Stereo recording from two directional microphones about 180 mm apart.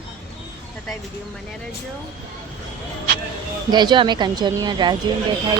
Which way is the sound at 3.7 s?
25° right (ahead or behind).